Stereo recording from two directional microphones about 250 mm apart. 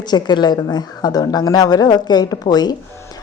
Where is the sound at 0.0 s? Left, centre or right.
Centre.